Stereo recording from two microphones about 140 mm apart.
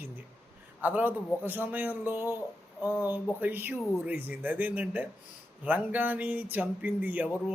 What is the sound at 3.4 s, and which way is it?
A man's voice, 15° right (ahead or behind).